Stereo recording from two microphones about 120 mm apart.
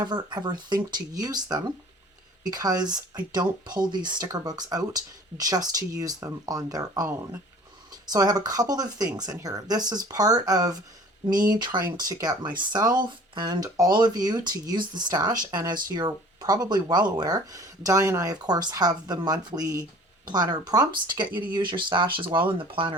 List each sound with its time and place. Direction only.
0.0 s speech: 35° right (ahead or behind)
8.1 s speech: 35° right (ahead or behind)